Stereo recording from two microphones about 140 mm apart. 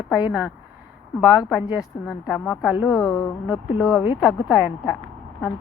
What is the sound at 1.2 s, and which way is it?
A woman's voice, 5° right (ahead or behind).